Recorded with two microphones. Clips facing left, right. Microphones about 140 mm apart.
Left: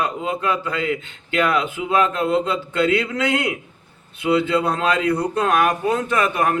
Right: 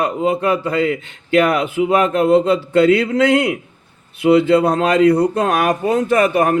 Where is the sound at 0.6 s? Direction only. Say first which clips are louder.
Right 6 dB; 35° right (ahead or behind).